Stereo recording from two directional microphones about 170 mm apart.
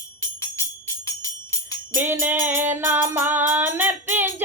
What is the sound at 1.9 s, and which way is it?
A woman's voice, 15° right (ahead or behind).